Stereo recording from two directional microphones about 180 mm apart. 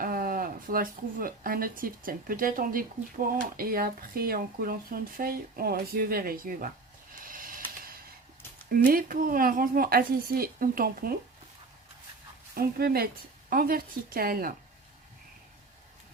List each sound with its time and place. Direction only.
0.0 s speech: 50° right (ahead or behind)
7.1 s a sound: 50° right (ahead or behind)
8.7 s speech: 50° right (ahead or behind)
12.5 s speech: 55° right (ahead or behind)